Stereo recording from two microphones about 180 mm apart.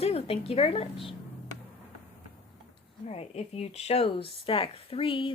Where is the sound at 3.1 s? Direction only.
35° left (ahead or behind).